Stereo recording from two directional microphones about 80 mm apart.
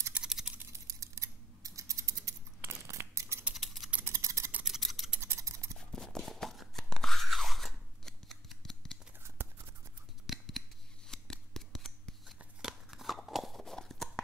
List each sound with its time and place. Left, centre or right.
0.1 s typing: centre
0.7 s typing: right
2.9 s scissors: right
3.5 s scissors: centre
4.0 s a sound: right
4.6 s scissors: centre
5.2 s scissors: right
5.8 s crunch: centre
9.4 s a sound: right
10.2 s scissors: centre
12.6 s a sound: centre